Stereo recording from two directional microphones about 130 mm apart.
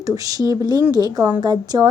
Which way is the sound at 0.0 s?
25° right (ahead or behind).